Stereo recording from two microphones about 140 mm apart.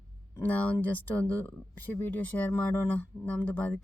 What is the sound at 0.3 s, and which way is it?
Speech, 10° left (ahead or behind).